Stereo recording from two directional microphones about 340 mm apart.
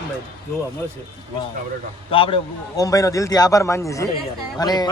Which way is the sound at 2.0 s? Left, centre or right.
Centre.